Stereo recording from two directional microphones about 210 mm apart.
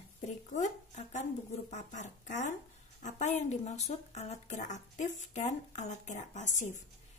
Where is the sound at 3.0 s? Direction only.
35° left (ahead or behind).